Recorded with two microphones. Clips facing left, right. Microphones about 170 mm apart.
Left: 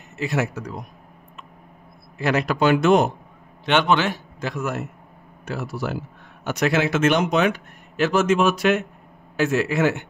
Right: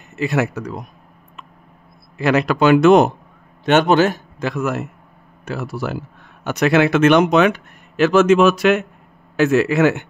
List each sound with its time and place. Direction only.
0.2 s speech: 65° right (ahead or behind)
2.1 s speech: 75° right (ahead or behind)
3.6 s a man's voice: 45° right (ahead or behind)
4.4 s speech: 80° right
6.4 s speech: 65° right (ahead or behind); by 8.8 s 90° right
9.4 s speech: 70° right (ahead or behind)